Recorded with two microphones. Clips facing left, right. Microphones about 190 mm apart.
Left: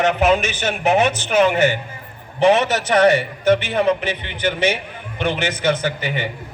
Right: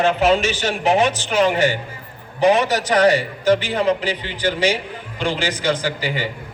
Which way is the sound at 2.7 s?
25° left (ahead or behind).